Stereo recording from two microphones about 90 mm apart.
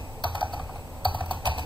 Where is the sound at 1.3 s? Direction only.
65° right (ahead or behind).